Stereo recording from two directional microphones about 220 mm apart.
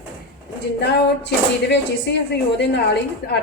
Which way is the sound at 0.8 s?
50° left (ahead or behind).